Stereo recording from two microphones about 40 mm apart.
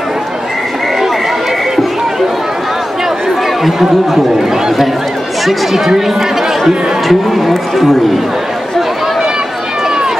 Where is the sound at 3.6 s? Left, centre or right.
Centre.